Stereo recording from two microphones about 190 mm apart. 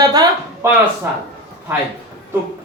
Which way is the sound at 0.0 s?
20° right (ahead or behind).